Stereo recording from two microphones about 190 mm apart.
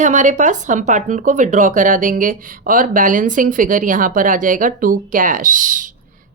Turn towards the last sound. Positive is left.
turn(degrees=-45)  # may be behind; listen again after turning